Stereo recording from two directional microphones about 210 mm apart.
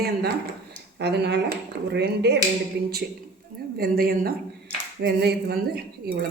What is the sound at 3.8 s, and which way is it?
Speech, 45° right (ahead or behind).